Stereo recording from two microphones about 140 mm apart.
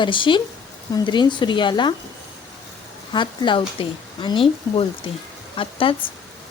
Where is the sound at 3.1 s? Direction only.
35° left (ahead or behind).